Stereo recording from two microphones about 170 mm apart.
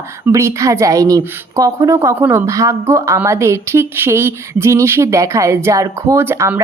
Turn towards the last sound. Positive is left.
turn(degrees=-15)  # may be behind; listen again after turning